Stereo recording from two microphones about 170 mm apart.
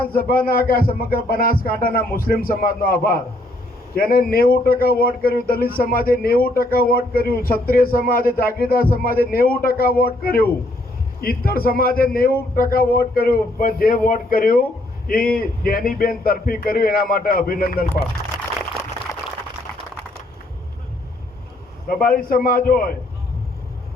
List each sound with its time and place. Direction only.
0.0 s a man's voice: 60° left (ahead or behind)
21.8 s a man's voice: 55° left (ahead or behind)